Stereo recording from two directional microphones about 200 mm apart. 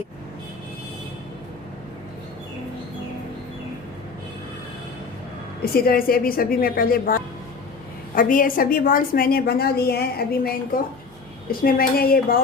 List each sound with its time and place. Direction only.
5.7 s a woman's voice: 50° left (ahead or behind)
11.6 s a woman's voice: 45° left (ahead or behind)